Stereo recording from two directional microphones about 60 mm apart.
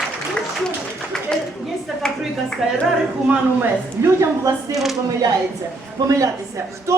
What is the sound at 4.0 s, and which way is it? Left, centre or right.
Speech, right.